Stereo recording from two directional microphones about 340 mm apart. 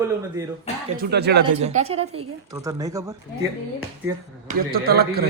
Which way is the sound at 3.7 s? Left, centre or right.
Right.